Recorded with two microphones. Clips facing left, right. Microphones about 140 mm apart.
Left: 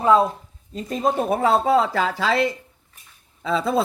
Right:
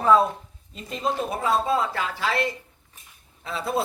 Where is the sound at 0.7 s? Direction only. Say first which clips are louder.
Left 5 dB; 45° left (ahead or behind).